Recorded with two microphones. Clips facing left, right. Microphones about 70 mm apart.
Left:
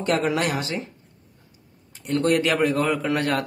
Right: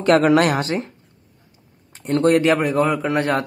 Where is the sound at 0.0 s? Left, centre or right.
Right.